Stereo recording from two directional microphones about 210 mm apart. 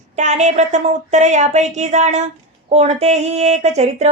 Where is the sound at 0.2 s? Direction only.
35° right (ahead or behind).